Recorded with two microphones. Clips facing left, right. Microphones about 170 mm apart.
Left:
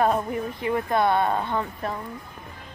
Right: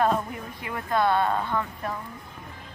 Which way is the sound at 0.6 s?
25° left (ahead or behind).